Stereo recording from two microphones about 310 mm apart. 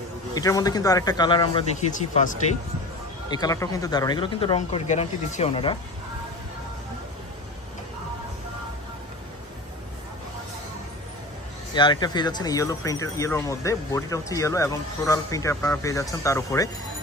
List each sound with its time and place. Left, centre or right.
0.3 s speech: centre
3.3 s speech: centre
11.7 s speech: centre